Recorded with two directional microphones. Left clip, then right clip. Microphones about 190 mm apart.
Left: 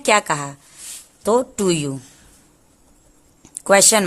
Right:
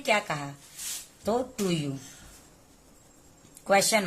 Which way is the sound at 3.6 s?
55° left (ahead or behind).